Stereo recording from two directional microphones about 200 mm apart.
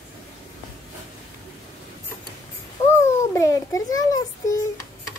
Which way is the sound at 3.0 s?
15° left (ahead or behind).